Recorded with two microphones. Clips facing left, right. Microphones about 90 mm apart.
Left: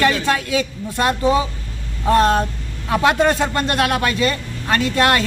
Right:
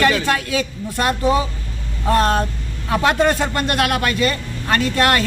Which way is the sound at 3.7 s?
25° left (ahead or behind).